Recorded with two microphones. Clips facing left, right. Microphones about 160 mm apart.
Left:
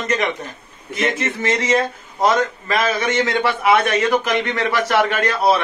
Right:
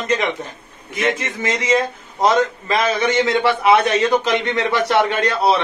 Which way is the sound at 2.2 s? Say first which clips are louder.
Right 1 dB; 25° right (ahead or behind).